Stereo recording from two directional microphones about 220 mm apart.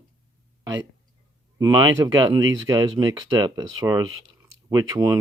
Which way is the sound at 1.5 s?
15° right (ahead or behind).